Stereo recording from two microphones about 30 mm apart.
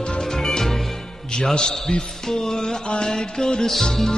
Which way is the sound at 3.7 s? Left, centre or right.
Centre.